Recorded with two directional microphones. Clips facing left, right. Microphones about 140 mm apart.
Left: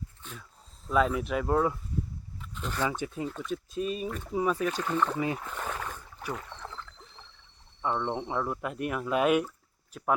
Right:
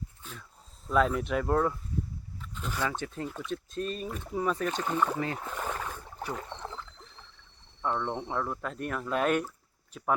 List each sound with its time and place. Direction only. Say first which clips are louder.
0.2 s a sound: left 1 dB; centre (ahead or behind)
0.9 s speech: even; centre (ahead or behind)
2.4 s a sound: left 1 dB; centre (ahead or behind)
2.8 s speech: left 2 dB; 10° left (ahead or behind)
3.2 s speech: left 2 dB; centre (ahead or behind)
4.7 s speech: even; 20° right (ahead or behind)
5.5 s rowboat: right 1 dB; 5° right (ahead or behind)
6.5 s frog: right 3 dB; 25° right (ahead or behind)
7.8 s speech: left 1 dB; 5° left (ahead or behind)